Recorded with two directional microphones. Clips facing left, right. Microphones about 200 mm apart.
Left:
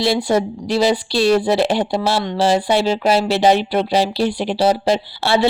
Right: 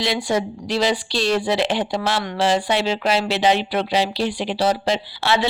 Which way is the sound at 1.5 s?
40° left (ahead or behind).